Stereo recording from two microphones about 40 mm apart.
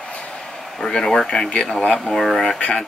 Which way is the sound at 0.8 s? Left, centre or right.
Centre.